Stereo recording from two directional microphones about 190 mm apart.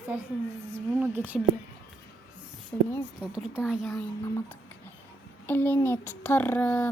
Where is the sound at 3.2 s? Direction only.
5° right (ahead or behind).